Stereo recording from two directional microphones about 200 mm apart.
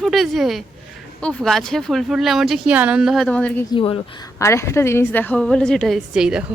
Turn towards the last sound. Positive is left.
turn(degrees=-5)  # may be behind; listen again after turning